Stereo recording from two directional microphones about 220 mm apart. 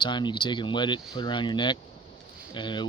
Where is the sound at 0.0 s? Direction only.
20° left (ahead or behind).